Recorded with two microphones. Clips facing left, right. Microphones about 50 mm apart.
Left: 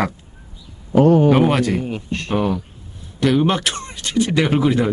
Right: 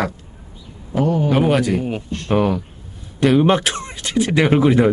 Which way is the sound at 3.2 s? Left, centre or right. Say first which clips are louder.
Right 3 dB; right.